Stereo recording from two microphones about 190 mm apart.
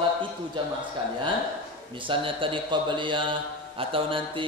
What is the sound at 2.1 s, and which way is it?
A man's voice, 25° right (ahead or behind).